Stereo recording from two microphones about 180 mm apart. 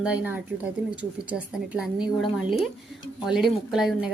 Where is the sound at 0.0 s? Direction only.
10° right (ahead or behind).